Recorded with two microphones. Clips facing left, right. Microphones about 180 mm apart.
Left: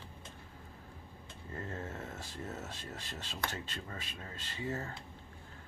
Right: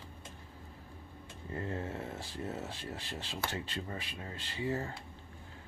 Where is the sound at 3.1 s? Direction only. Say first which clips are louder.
Right 1 dB; 15° right (ahead or behind).